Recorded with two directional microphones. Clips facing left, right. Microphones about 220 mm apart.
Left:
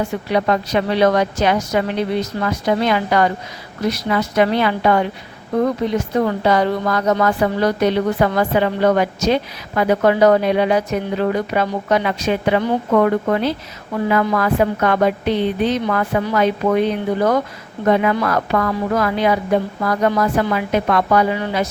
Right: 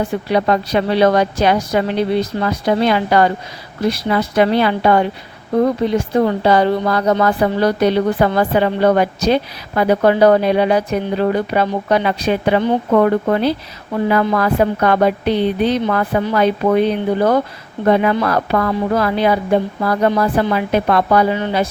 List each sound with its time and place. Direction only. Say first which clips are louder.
0.3 s a woman's voice: right 2 dB; 35° right (ahead or behind)
6.2 s a woman's voice: right 3 dB; 30° right (ahead or behind)